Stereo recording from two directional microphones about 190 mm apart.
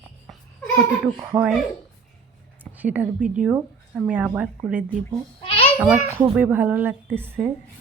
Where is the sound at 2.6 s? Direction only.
10° right (ahead or behind).